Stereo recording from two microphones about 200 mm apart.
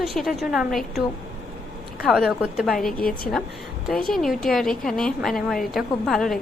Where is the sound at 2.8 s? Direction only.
45° left (ahead or behind).